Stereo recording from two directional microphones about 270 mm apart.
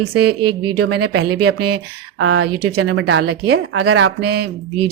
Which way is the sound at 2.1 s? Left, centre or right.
Right.